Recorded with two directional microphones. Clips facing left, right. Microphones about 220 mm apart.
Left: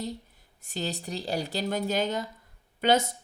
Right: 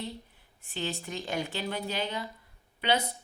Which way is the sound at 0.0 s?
40° left (ahead or behind).